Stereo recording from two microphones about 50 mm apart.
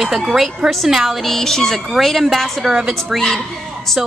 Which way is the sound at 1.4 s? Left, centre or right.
Centre.